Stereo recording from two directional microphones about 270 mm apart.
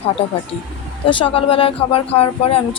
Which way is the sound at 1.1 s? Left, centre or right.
Centre.